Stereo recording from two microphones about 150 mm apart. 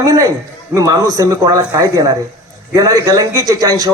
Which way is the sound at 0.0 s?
20° right (ahead or behind).